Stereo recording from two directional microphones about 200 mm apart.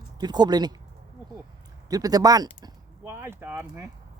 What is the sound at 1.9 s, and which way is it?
Speech, 20° right (ahead or behind).